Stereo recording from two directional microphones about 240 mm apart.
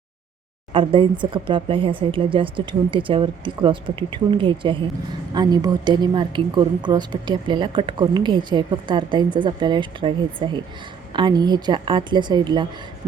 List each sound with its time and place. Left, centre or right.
0.7 s a woman's voice: right